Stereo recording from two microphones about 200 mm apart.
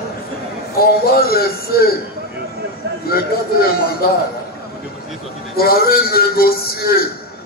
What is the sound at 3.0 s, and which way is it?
A man's voice, 50° left (ahead or behind).